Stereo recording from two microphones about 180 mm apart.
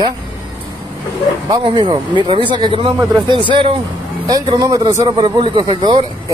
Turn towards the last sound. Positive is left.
turn(degrees=-25)  # may be behind; listen again after turning